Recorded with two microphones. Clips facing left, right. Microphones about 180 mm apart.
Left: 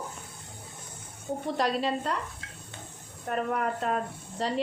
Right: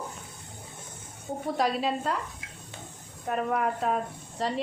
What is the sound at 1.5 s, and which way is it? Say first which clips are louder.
Speech: right 1 dB; 5° right (ahead or behind).